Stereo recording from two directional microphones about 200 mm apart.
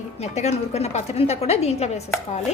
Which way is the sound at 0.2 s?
35° left (ahead or behind).